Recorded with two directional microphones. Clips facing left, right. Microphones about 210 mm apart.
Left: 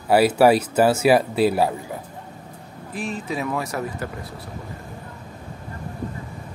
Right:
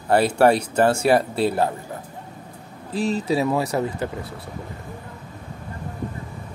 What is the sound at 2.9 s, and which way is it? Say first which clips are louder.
Speech: right 6 dB; 30° right (ahead or behind).